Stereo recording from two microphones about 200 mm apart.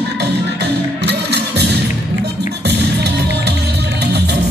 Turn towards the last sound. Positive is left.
turn(degrees=-55)  # may be behind; listen again after turning